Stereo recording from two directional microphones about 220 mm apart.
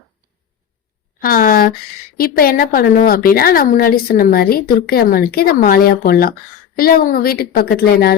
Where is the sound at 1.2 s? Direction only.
40° left (ahead or behind).